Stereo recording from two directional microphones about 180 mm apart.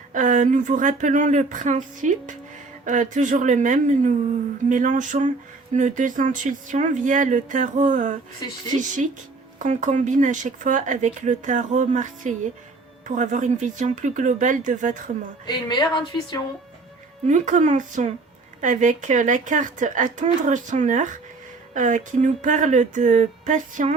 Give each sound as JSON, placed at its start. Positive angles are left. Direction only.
{"t": 0.1, "sound": "speech", "side_deg": -45}
{"t": 9.6, "sound": "speech", "side_deg": -40}
{"t": 15.4, "sound": "speech", "side_deg": 25}
{"t": 17.2, "sound": "speech", "side_deg": -40}